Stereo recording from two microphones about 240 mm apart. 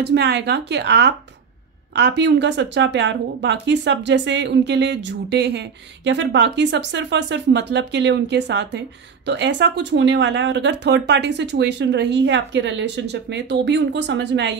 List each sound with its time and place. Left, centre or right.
0.0 s speech: right